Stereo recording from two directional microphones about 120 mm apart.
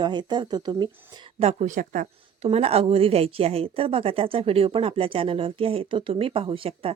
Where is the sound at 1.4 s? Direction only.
70° right (ahead or behind).